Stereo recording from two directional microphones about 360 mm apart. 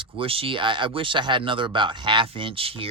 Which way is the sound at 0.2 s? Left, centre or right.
Centre.